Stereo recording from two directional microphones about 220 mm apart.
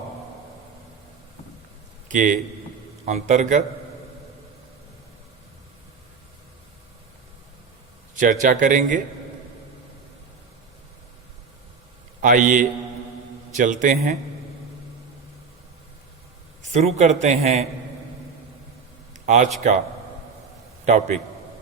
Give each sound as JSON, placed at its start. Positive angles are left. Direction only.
{"t": 2.0, "sound": "a man's voice", "side_deg": -35}
{"t": 8.1, "sound": "a man's voice", "side_deg": -35}
{"t": 12.2, "sound": "a man's voice", "side_deg": -35}
{"t": 16.7, "sound": "a man's voice", "side_deg": -30}
{"t": 19.1, "sound": "a sound", "side_deg": -35}
{"t": 20.8, "sound": "a man's voice", "side_deg": -30}